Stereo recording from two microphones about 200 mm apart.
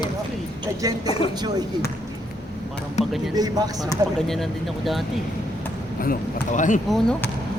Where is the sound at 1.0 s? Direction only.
30° left (ahead or behind).